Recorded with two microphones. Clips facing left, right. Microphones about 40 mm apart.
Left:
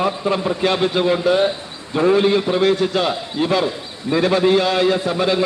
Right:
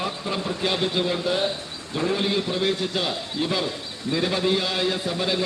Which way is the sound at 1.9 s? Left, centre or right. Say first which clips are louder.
Left 9 dB; left.